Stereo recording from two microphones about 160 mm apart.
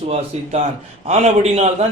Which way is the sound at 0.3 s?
40° right (ahead or behind).